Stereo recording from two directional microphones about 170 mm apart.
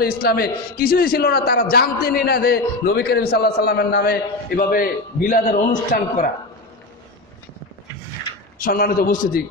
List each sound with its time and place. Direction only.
0.0 s a man's voice: 65° left (ahead or behind); by 6.3 s 50° left (ahead or behind)
8.5 s a man's voice: 60° left (ahead or behind)